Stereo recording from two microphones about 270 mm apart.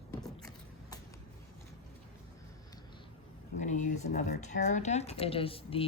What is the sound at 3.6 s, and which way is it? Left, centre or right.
Speech, left.